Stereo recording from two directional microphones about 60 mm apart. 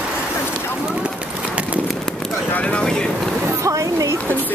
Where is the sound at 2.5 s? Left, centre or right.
Left.